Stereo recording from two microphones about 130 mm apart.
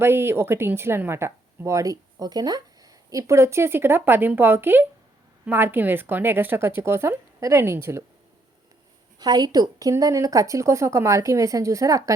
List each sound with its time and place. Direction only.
0.0 s a woman's voice: 20° right (ahead or behind)
9.1 s speech: 30° right (ahead or behind)